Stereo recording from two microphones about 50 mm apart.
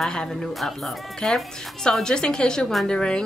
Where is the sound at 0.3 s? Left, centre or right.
Centre.